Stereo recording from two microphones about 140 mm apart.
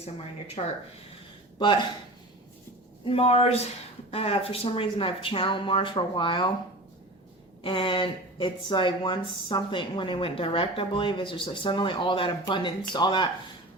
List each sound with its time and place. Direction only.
0.6 s speech: 45° left (ahead or behind)
1.5 s speech: 35° left (ahead or behind)
3.0 s speech: 45° left (ahead or behind)
7.6 s speech: 40° left (ahead or behind)